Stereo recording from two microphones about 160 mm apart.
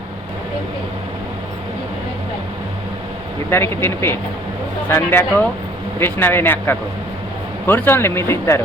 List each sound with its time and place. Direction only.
3.5 s speech: 15° left (ahead or behind)